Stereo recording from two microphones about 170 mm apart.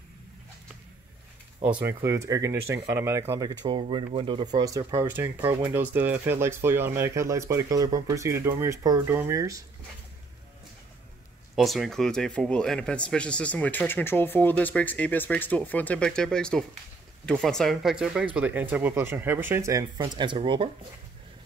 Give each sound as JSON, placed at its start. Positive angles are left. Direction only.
{"t": 1.6, "sound": "speech", "side_deg": -10}
{"t": 11.5, "sound": "speech", "side_deg": 0}